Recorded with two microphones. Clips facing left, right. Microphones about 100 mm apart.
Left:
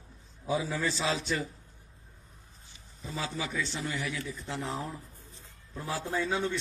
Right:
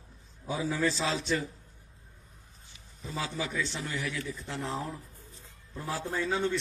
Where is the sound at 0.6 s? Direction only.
Centre (ahead or behind).